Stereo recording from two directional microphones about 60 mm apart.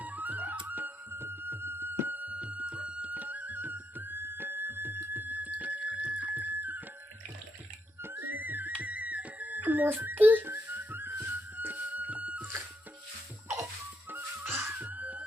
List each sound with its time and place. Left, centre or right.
0.0 s music: right
8.0 s music: right
14.1 s music: right
14.8 s music: right